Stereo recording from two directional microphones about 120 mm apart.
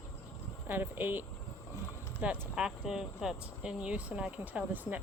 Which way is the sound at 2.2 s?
10° right (ahead or behind).